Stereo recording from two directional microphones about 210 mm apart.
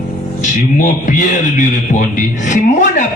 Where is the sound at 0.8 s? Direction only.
35° left (ahead or behind).